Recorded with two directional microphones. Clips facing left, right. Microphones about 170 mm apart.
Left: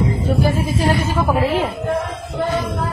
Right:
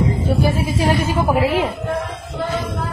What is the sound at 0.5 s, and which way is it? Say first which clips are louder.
A woman's voice: even; 10° right (ahead or behind).